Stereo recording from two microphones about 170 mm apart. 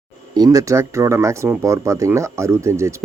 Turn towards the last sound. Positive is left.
turn(degrees=-15)  # may be behind; listen again after turning